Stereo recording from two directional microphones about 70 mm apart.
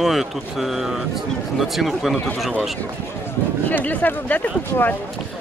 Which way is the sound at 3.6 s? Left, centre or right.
Left.